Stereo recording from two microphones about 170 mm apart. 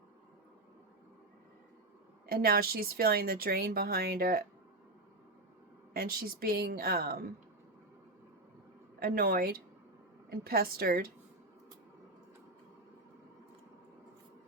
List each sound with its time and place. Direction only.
2.2 s speech: 65° right (ahead or behind)
5.9 s speech: 60° right (ahead or behind)
9.0 s speech: 60° right (ahead or behind)